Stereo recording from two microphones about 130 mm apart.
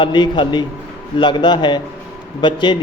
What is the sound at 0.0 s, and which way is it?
A man's voice, 35° left (ahead or behind).